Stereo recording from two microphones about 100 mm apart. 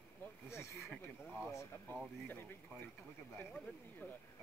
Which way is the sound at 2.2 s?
20° left (ahead or behind).